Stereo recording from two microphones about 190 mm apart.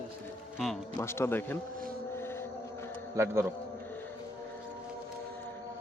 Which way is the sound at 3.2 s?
15° right (ahead or behind).